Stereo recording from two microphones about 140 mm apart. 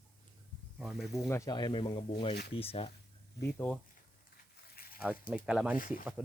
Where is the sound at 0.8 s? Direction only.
5° right (ahead or behind).